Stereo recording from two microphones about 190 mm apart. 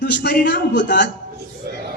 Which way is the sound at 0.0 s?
60° left (ahead or behind).